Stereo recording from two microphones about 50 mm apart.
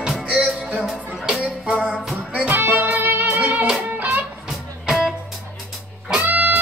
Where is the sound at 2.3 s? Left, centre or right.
Right.